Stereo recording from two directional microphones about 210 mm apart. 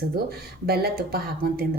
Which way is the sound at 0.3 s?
50° right (ahead or behind).